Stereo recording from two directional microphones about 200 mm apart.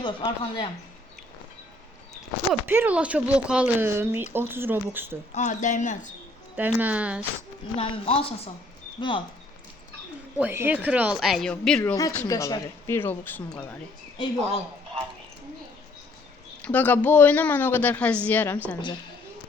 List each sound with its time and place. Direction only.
0.0 s speech: 25° left (ahead or behind)
2.5 s speech: 10° right (ahead or behind)
5.3 s speech: 35° left (ahead or behind)
6.6 s speech: 10° right (ahead or behind)
7.8 s speech: 30° left (ahead or behind)
10.3 s speech: 10° right (ahead or behind)
11.8 s speech: 15° left (ahead or behind)
16.6 s speech: 10° left (ahead or behind)